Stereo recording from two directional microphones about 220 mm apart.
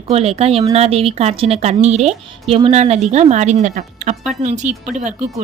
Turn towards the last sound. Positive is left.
turn(degrees=-30)  # may be behind; listen again after turning